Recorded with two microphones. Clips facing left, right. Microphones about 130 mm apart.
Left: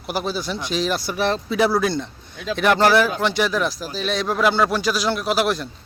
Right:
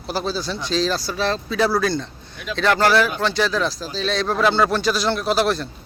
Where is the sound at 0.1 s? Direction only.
15° left (ahead or behind).